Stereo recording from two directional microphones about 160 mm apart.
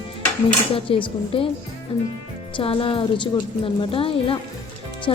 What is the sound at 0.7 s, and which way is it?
Speech, 35° left (ahead or behind).